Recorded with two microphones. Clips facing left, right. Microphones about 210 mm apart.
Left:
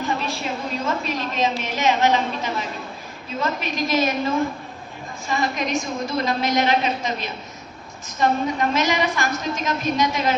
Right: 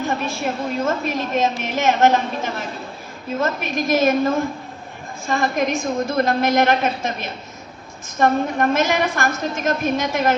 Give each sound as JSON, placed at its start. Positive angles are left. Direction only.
{"t": 0.3, "sound": "a woman's voice", "side_deg": -50}